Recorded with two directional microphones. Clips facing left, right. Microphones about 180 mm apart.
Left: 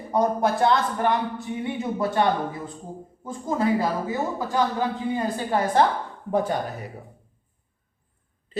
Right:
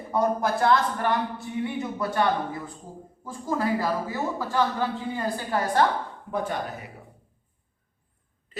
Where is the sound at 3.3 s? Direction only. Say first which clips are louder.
Left 3 dB; 20° left (ahead or behind).